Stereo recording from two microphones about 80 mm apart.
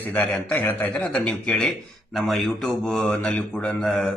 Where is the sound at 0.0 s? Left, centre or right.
Left.